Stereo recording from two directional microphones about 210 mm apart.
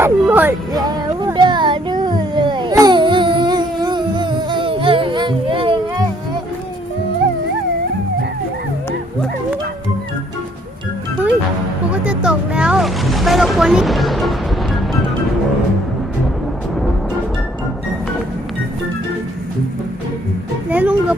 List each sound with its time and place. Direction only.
0.0 s music: 10° right (ahead or behind); by 6.1 s 25° right (ahead or behind)
11.9 s a sound: 5° right (ahead or behind)
20.7 s music: 5° right (ahead or behind)